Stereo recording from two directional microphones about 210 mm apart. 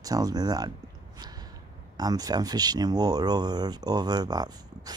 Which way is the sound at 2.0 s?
20° right (ahead or behind).